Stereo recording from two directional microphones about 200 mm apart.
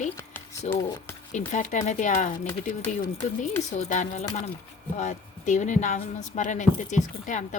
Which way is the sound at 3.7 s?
35° left (ahead or behind).